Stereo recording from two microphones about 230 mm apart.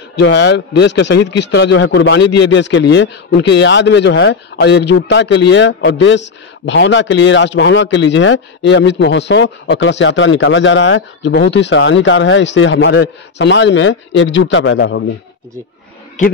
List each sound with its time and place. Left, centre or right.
0.1 s a man's voice: left
16.2 s a man's voice: left